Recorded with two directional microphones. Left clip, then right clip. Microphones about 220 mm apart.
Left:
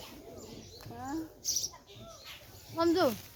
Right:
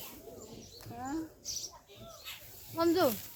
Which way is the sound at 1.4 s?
50° left (ahead or behind).